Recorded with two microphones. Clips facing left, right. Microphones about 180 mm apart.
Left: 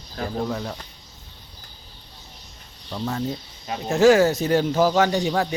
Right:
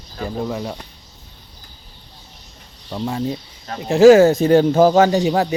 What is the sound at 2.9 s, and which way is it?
Speech, 15° right (ahead or behind).